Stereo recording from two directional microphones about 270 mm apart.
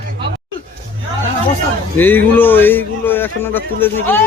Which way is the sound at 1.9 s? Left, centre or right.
Centre.